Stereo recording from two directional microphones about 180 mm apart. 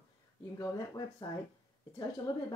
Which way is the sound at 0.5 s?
20° left (ahead or behind).